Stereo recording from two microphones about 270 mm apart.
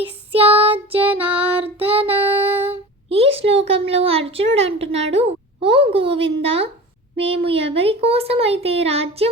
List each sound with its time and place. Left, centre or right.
0.0 s child singing: right
2.6 s a sound: right
7.2 s speech: right